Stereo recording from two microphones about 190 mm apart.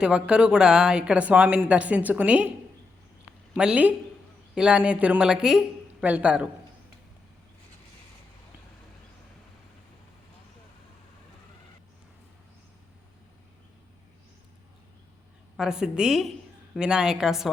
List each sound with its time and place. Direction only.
0.0 s speech: 5° right (ahead or behind)
3.5 s a woman's voice: 5° right (ahead or behind)
15.5 s a woman's voice: 5° right (ahead or behind)